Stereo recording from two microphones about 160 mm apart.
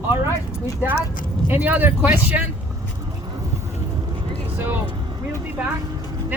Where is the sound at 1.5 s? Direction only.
10° right (ahead or behind).